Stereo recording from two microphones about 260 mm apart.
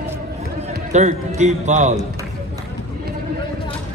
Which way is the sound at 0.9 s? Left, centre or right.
Right.